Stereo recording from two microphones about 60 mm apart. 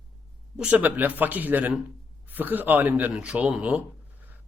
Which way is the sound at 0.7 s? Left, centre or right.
Right.